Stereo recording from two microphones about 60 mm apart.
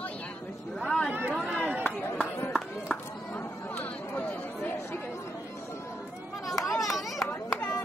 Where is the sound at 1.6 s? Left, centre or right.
Right.